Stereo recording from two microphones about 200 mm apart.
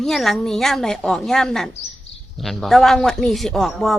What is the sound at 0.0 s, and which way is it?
Speech, centre (ahead or behind).